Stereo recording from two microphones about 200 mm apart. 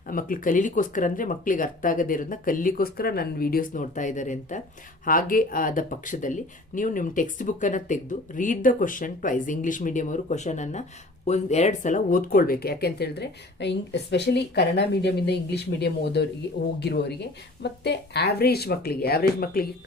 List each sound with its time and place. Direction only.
0.1 s speech: 45° left (ahead or behind)